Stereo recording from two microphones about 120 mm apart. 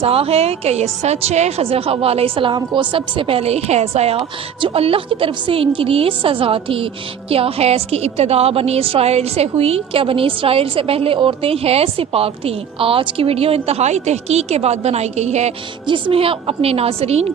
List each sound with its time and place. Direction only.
0.0 s a woman's voice: 55° right (ahead or behind)
4.2 s a woman's voice: 50° right (ahead or behind); by 15.5 s 70° right (ahead or behind)
15.9 s a woman's voice: 45° right (ahead or behind)